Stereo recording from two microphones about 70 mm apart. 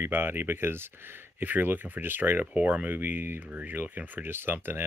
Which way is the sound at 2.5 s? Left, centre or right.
Centre.